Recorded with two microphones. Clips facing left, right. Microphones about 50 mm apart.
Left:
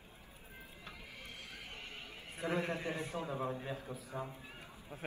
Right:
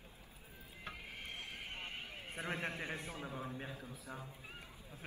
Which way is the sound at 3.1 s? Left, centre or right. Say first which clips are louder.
Left 6 dB; left.